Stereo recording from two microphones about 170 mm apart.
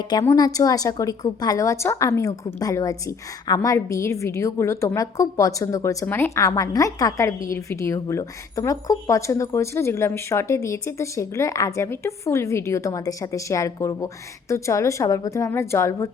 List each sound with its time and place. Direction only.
0.1 s a woman's voice: 25° left (ahead or behind)